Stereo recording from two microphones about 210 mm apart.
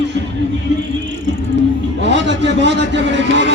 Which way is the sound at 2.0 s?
55° right (ahead or behind).